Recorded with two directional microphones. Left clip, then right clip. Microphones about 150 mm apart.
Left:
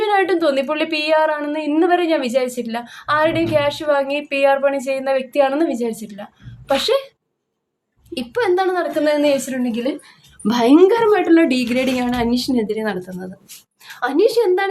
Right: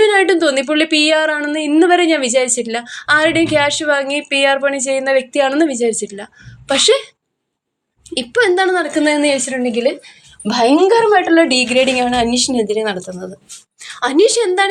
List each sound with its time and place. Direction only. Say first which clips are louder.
0.0 s a woman's voice: right 5 dB; 5° right (ahead or behind)
8.1 s a woman's voice: right 5 dB; 10° right (ahead or behind)
10.4 s a woman's voice: right 1 dB; 20° left (ahead or behind)
14.0 s a woman's voice: right 3 dB; 10° right (ahead or behind)